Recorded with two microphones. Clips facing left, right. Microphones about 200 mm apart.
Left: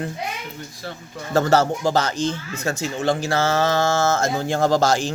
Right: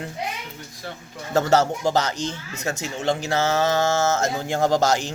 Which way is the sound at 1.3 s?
20° right (ahead or behind).